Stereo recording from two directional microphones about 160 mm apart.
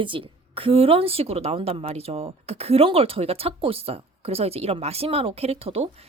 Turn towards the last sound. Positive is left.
turn(degrees=-40)  # may be behind; listen again after turning